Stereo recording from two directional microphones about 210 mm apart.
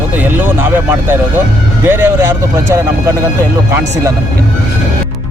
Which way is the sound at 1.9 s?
10° right (ahead or behind).